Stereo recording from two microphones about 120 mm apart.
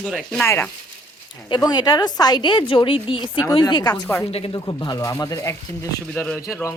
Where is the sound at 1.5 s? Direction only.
35° left (ahead or behind).